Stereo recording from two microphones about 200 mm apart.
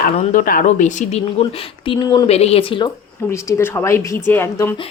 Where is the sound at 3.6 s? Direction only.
10° left (ahead or behind).